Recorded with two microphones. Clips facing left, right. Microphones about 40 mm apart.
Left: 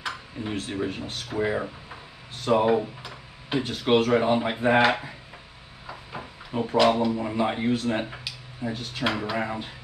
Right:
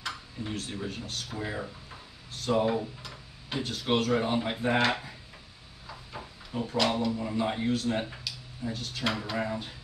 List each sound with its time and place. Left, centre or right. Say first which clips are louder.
0.0 s speech: left 4 dB; left
5.9 s a sound: left 5 dB; left
6.8 s speech: left 7 dB; centre
7.1 s speech: left 4 dB; left